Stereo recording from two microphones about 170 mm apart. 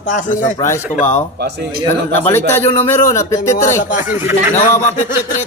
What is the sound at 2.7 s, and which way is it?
Speech, 15° left (ahead or behind).